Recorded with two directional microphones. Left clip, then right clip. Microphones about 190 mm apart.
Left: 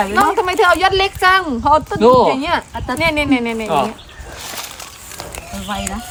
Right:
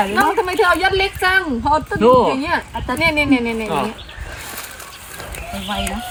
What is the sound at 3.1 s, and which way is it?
Speech, 15° left (ahead or behind).